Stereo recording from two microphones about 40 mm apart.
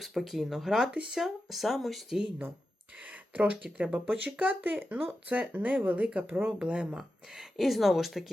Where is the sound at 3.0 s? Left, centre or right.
Right.